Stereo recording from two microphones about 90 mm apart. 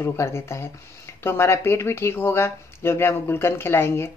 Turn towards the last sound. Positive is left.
turn(degrees=30)  # may be behind; listen again after turning